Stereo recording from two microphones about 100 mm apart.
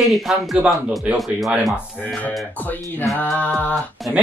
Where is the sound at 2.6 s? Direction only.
15° left (ahead or behind).